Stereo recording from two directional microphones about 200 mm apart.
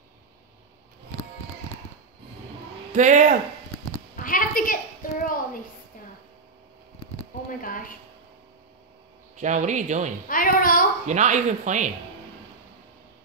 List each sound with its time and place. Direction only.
2.9 s speech: 40° right (ahead or behind)
4.2 s a sound: 45° left (ahead or behind)
9.4 s speech: 35° right (ahead or behind)
10.2 s a woman's voice: 45° left (ahead or behind)
11.1 s speech: 35° right (ahead or behind)